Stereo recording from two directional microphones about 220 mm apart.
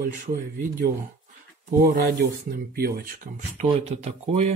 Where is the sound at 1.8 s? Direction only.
35° right (ahead or behind).